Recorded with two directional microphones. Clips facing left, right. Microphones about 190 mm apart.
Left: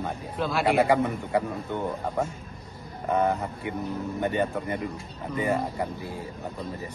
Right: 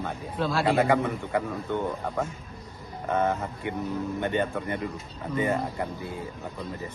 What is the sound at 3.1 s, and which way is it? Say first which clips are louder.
Speech: left 1 dB; 15° left (ahead or behind).